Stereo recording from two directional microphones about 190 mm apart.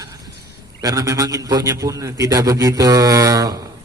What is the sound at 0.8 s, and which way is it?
A man's voice, 20° right (ahead or behind).